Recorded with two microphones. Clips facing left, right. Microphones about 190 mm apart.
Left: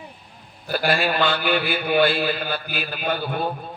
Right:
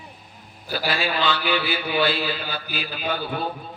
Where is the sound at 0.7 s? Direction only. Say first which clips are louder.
Left 4 dB; 55° left (ahead or behind).